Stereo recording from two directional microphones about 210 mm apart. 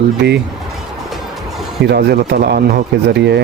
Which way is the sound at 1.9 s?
50° right (ahead or behind).